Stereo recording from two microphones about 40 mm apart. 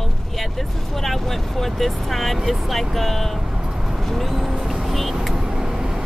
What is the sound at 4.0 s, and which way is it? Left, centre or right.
Speech, centre.